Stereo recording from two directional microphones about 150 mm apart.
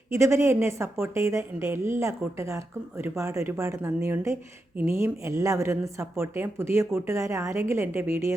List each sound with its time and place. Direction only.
0.1 s a woman's voice: 20° right (ahead or behind)